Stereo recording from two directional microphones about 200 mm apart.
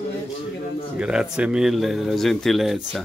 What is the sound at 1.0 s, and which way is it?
Speech, 5° right (ahead or behind).